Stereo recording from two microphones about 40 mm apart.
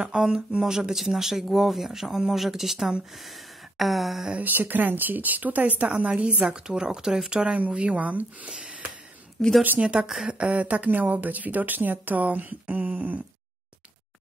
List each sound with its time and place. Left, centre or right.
0.1 s speech: centre
3.7 s a sound: centre
4.4 s speech: right
6.4 s speech: centre
7.6 s a woman's voice: right
8.5 s speech: right
9.4 s a woman's voice: centre
9.8 s speech: right
10.5 s speech: right